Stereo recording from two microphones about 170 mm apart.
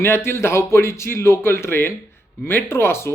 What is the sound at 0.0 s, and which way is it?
Speech, 15° left (ahead or behind).